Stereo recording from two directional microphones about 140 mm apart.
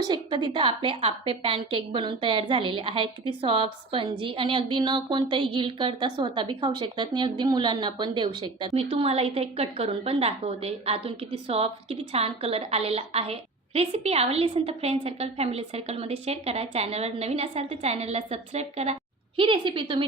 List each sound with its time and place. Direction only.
0.1 s a woman's voice: 35° right (ahead or behind)
8.7 s a woman's voice: 45° right (ahead or behind)
19.4 s a woman's voice: 40° right (ahead or behind)